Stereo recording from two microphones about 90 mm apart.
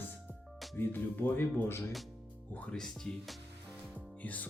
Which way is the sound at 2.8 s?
Centre (ahead or behind).